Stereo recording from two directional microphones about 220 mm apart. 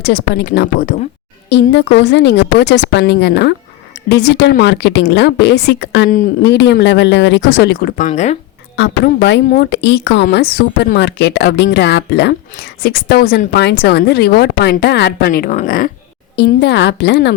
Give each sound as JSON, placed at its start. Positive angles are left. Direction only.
{"t": 0.0, "sound": "speech", "side_deg": 50}
{"t": 6.1, "sound": "speech", "side_deg": 35}
{"t": 6.5, "sound": "speech", "side_deg": 50}
{"t": 8.7, "sound": "speech", "side_deg": 50}
{"t": 16.3, "sound": "speech", "side_deg": 50}